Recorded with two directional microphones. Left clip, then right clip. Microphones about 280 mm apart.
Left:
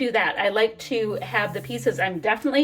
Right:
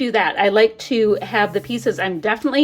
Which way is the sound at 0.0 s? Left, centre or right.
Centre.